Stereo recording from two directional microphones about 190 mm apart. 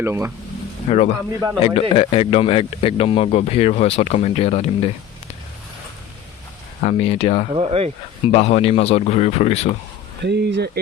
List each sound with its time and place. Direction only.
0.0 s speech: 15° right (ahead or behind)
0.9 s speech: 35° left (ahead or behind)
6.8 s speech: 35° left (ahead or behind)
7.5 s speech: 30° right (ahead or behind)
8.3 s speech: 35° left (ahead or behind)
10.2 s speech: 65° right (ahead or behind)